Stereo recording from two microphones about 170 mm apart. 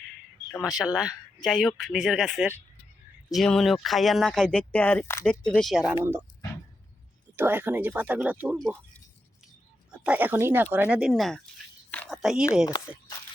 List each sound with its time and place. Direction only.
0.8 s speech: 5° right (ahead or behind)
5.9 s speech: 15° right (ahead or behind)
7.3 s speech: 10° right (ahead or behind)
9.9 s speech: 5° right (ahead or behind)
11.9 s a sound: 5° left (ahead or behind)
12.7 s speech: 25° left (ahead or behind)